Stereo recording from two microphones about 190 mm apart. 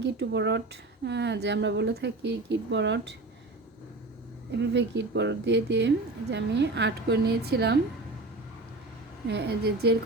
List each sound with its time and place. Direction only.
0.0 s speech: 65° right (ahead or behind)
4.7 s speech: 65° right (ahead or behind)
9.2 s speech: 60° right (ahead or behind)